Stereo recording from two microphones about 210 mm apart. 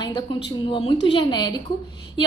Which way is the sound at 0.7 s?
25° left (ahead or behind).